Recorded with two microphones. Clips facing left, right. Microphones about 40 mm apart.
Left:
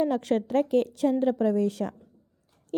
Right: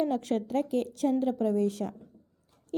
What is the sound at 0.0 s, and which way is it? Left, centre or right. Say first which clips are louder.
A woman's voice: left 3 dB; left.